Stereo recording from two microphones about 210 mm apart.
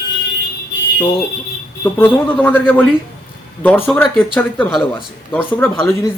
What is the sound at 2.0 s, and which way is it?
Speech, 10° left (ahead or behind).